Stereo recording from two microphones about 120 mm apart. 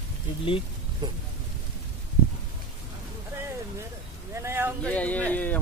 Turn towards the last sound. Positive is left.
turn(degrees=15)  # may be behind; listen again after turning